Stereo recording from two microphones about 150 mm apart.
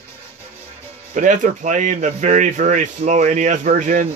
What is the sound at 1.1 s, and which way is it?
Speech, 55° right (ahead or behind).